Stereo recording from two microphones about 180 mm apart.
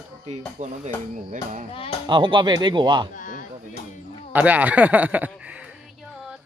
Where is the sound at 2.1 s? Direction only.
25° right (ahead or behind).